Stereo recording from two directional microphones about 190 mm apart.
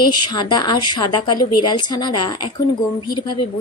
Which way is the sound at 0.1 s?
25° left (ahead or behind).